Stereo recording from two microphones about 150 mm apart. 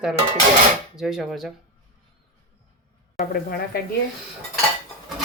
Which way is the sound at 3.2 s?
75° left (ahead or behind).